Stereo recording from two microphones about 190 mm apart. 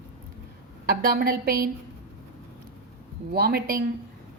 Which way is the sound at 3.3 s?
55° right (ahead or behind).